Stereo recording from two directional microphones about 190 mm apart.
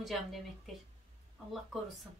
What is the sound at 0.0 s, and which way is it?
Speech, centre (ahead or behind).